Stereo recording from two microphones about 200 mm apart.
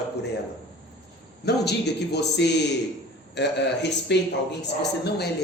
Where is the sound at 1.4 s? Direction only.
55° left (ahead or behind).